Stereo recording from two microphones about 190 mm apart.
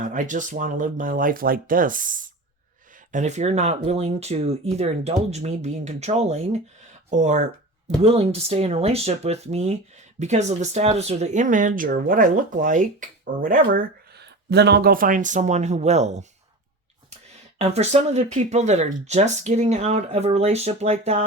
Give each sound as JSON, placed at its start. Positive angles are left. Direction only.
{"t": 0.0, "sound": "speech", "side_deg": -40}
{"t": 17.6, "sound": "speech", "side_deg": -35}